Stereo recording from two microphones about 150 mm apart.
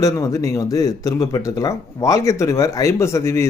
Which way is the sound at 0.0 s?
20° left (ahead or behind).